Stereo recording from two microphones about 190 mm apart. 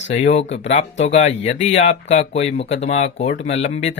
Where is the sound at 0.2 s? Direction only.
35° left (ahead or behind).